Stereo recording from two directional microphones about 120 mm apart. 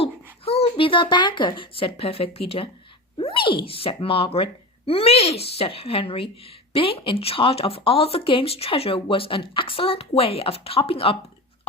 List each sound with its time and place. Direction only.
0.4 s speech: 55° left (ahead or behind)